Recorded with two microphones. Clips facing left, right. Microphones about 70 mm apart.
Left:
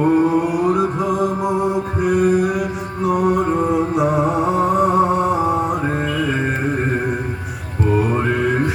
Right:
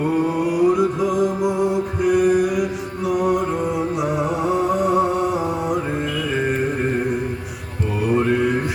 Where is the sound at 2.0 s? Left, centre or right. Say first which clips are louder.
Even; left.